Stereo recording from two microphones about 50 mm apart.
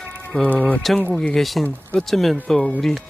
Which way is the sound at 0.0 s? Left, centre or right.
Left.